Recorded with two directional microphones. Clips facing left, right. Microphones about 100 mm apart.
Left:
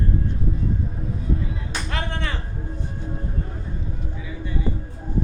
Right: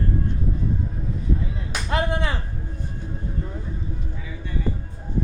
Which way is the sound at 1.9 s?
15° right (ahead or behind).